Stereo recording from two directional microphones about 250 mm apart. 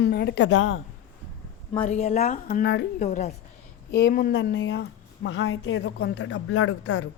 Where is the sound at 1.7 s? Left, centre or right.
Left.